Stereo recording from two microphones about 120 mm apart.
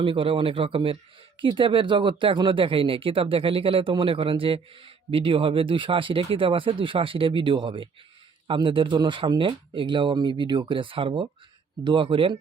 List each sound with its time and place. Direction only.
0.0 s speech: 50° right (ahead or behind)